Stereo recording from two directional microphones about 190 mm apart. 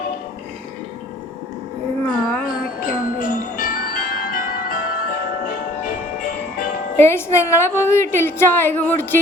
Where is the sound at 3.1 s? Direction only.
45° left (ahead or behind).